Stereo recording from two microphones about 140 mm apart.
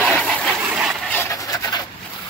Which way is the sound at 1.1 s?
20° left (ahead or behind).